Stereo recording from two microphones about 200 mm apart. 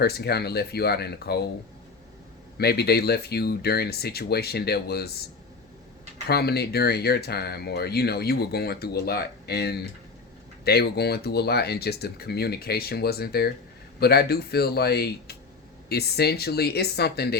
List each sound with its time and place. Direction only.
0.0 s speech: 55° left (ahead or behind)
2.6 s speech: 55° left (ahead or behind)
6.2 s speech: 55° left (ahead or behind)